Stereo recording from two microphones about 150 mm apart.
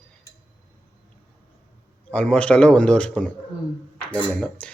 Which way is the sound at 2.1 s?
5° left (ahead or behind).